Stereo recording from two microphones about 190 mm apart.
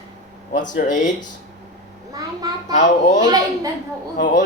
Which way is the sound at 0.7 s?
40° left (ahead or behind).